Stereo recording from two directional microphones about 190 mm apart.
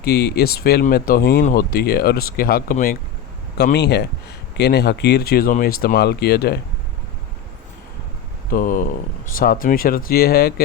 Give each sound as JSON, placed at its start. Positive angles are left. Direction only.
{"t": 0.0, "sound": "speech", "side_deg": 55}
{"t": 3.6, "sound": "speech", "side_deg": 60}
{"t": 8.4, "sound": "speech", "side_deg": 45}